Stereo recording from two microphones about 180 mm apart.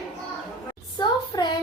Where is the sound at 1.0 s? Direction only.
25° left (ahead or behind).